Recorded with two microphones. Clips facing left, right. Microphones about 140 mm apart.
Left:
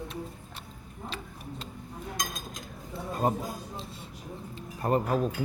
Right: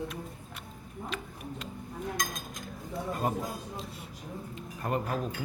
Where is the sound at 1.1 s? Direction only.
30° left (ahead or behind).